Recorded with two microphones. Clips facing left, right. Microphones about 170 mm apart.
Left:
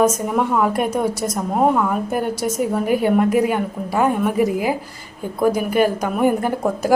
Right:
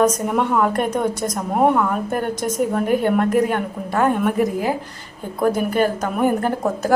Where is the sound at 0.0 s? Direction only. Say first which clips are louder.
Even; 5° left (ahead or behind).